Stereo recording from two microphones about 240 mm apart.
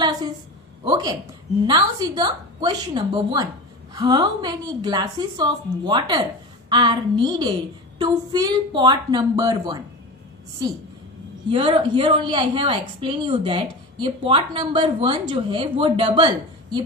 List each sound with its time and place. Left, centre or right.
0.8 s a woman's voice: centre
11.5 s a woman's voice: centre